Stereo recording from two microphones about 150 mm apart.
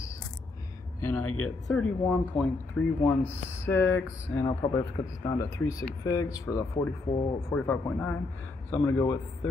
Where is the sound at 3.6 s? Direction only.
15° left (ahead or behind).